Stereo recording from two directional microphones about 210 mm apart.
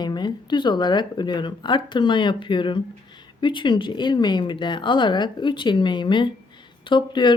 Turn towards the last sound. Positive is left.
turn(degrees=20)  # may be behind; listen again after turning